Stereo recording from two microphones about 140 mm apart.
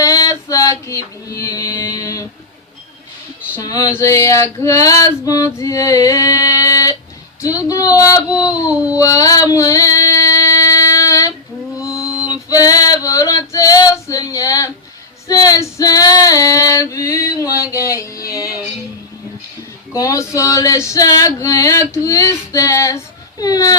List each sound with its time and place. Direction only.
0.0 s music: 25° left (ahead or behind)
3.5 s female singing: 25° left (ahead or behind)
19.9 s female singing: 20° left (ahead or behind)